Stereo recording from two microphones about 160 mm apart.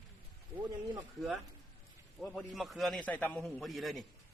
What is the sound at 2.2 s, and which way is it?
A man's voice, 5° left (ahead or behind).